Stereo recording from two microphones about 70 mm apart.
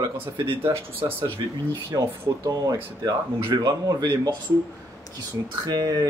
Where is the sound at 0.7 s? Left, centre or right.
Right.